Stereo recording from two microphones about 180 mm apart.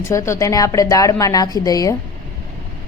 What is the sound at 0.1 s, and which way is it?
A woman's voice, 15° left (ahead or behind).